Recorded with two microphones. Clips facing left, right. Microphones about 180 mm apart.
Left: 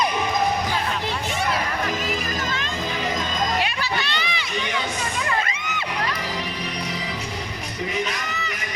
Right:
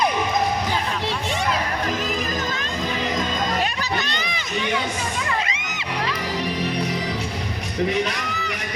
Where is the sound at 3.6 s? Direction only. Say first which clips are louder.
Right 1 dB; 45° right (ahead or behind).